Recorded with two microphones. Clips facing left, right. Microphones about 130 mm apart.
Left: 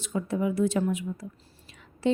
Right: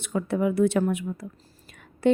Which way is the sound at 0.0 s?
65° right (ahead or behind).